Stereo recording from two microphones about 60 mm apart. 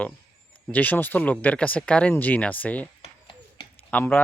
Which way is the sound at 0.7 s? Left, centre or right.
Left.